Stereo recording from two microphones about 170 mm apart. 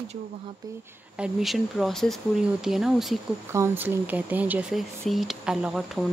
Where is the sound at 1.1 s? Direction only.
Centre (ahead or behind).